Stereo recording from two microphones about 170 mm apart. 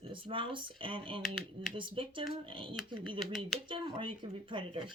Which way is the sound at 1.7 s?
30° right (ahead or behind).